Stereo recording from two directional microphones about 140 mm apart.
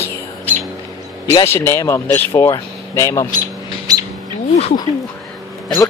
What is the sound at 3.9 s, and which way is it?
Bird, 25° right (ahead or behind).